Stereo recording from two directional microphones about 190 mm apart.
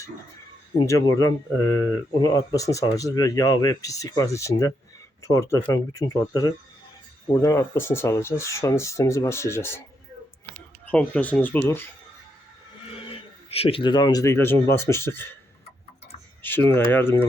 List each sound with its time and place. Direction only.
0.8 s speech: 20° left (ahead or behind)
10.8 s speech: 5° left (ahead or behind)
13.1 s speech: 30° left (ahead or behind); by 15.3 s 10° left (ahead or behind)
16.4 s speech: 10° left (ahead or behind)